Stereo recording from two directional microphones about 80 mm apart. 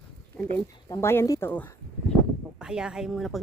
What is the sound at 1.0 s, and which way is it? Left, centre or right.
Speech, left.